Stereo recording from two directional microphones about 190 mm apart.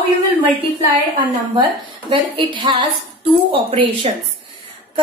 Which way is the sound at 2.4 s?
25° right (ahead or behind).